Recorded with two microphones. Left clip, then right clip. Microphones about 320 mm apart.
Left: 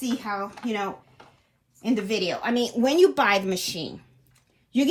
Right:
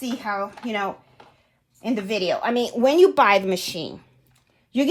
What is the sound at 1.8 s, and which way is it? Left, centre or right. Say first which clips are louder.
A woman's voice: right 1 dB; right.